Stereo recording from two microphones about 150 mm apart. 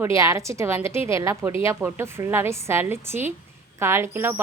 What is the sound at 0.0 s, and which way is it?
A woman's voice, 20° right (ahead or behind).